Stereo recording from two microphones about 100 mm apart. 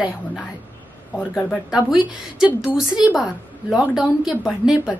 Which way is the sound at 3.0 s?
45° left (ahead or behind).